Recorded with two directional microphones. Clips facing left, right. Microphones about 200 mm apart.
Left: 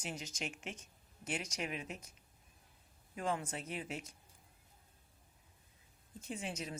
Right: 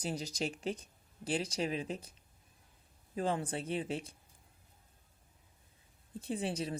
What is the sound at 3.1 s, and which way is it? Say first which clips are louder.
Speech: right 4 dB; 30° right (ahead or behind).